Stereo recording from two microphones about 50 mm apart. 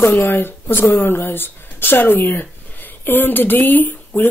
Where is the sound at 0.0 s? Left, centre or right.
Left.